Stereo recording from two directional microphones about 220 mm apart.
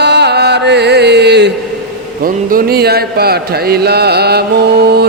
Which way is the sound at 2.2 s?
40° right (ahead or behind).